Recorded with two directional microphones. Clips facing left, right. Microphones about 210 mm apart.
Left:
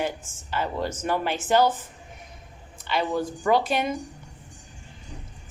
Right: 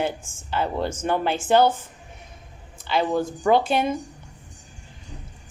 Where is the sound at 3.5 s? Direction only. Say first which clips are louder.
Right 3 dB; 30° right (ahead or behind).